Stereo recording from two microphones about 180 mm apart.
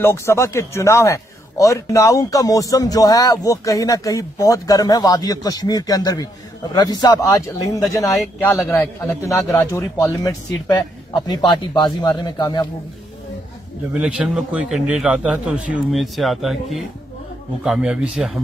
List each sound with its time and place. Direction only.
0.0 s a man's voice: 15° left (ahead or behind)
13.9 s a man's voice: 5° right (ahead or behind)